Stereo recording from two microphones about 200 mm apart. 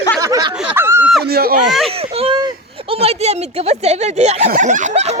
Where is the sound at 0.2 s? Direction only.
20° right (ahead or behind).